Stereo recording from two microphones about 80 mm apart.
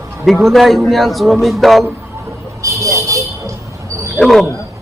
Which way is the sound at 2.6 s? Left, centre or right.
Right.